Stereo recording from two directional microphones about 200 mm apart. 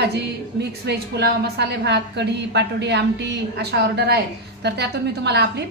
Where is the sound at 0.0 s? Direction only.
55° right (ahead or behind).